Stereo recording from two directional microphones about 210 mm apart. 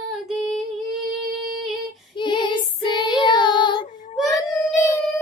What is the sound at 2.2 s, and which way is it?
Child singing, 20° left (ahead or behind).